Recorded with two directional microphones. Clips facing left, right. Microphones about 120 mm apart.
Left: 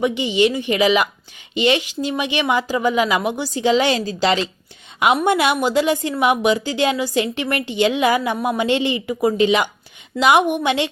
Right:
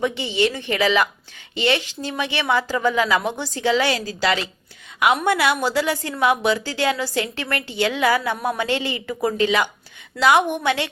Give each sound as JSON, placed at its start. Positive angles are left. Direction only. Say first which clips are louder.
{"t": 0.0, "sound": "speech", "louder": "left 4 dB", "side_deg": 15}